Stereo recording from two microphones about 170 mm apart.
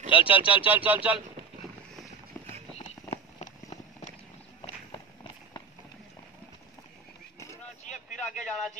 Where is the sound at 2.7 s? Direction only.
40° left (ahead or behind).